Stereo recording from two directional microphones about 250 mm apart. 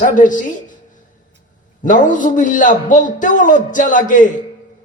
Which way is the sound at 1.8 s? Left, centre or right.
Left.